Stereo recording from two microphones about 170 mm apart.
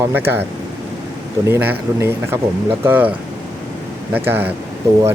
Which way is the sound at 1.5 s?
15° right (ahead or behind).